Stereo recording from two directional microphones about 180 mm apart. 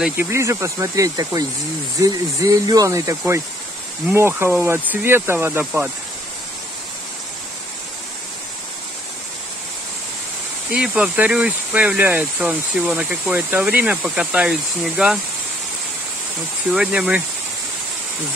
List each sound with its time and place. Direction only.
0.0 s speech: 15° right (ahead or behind)
10.7 s speech: 5° right (ahead or behind)
16.7 s speech: 5° right (ahead or behind)